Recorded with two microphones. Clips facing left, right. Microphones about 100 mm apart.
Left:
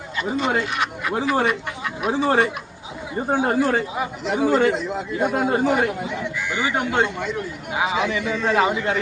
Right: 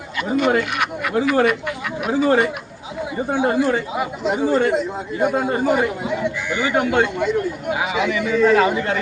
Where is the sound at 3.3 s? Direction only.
45° left (ahead or behind).